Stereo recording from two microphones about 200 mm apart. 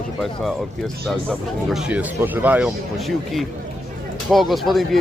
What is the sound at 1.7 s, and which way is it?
Speech, 5° right (ahead or behind).